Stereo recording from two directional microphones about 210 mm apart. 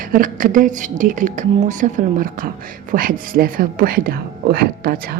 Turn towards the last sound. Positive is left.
turn(degrees=-45)  # may be behind; listen again after turning